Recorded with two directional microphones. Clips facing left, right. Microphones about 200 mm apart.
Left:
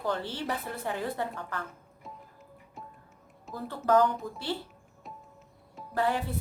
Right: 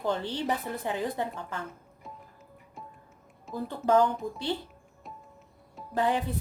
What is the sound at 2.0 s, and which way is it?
Music, centre (ahead or behind).